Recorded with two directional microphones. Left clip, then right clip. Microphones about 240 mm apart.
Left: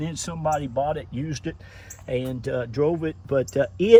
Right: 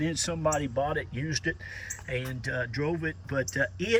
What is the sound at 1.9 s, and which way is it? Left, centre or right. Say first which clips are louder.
Speech: left 7 dB; centre.